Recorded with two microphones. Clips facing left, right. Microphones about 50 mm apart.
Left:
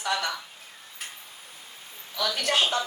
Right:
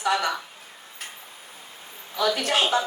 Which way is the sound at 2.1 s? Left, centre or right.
Right.